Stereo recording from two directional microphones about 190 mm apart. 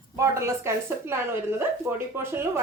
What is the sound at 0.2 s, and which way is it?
A woman's voice, 15° right (ahead or behind).